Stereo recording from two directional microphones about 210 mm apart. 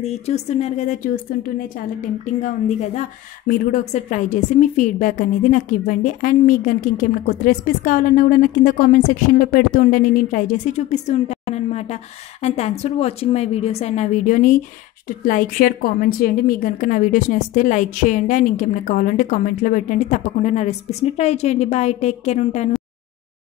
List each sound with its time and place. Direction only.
0.0 s speech: 30° left (ahead or behind)